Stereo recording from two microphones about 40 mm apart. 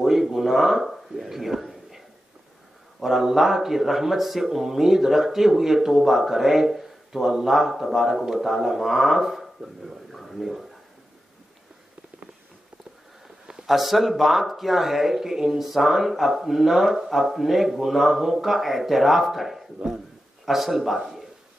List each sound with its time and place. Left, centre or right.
0.0 s a sound: centre
3.0 s speech: centre
13.7 s speech: centre
19.8 s a man's voice: right
20.4 s speech: centre